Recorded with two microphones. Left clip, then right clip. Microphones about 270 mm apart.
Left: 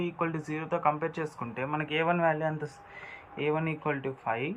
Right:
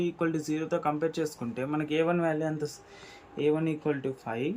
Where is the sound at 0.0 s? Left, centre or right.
Right.